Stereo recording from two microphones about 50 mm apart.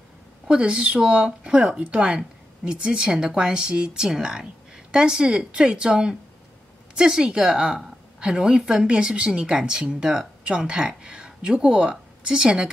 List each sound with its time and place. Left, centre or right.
0.5 s a woman's voice: right